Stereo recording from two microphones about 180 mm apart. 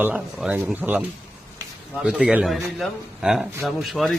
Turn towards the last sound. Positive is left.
turn(degrees=0)  # may be behind; listen again after turning